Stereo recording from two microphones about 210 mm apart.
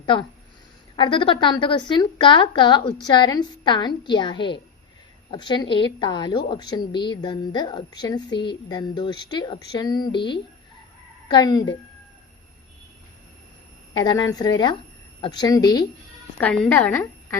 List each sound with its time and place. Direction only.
0.0 s a woman's voice: 20° left (ahead or behind)
13.9 s a woman's voice: 20° left (ahead or behind)
16.4 s a woman's voice: 5° left (ahead or behind)